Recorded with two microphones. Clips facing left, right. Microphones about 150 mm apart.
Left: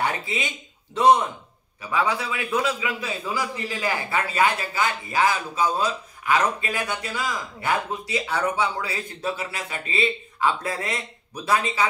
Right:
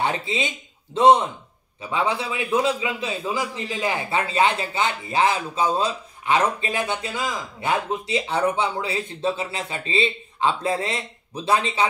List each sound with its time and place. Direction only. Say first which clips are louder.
0.0 s a man's voice: right 2 dB; 25° right (ahead or behind)